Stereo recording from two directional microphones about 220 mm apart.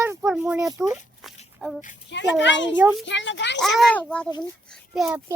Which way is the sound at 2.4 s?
55° left (ahead or behind).